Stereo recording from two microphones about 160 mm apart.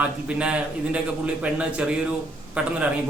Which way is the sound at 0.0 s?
5° right (ahead or behind).